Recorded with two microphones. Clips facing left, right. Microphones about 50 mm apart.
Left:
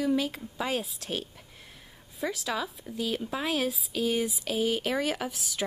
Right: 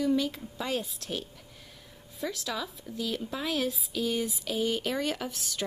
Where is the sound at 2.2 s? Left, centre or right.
Centre.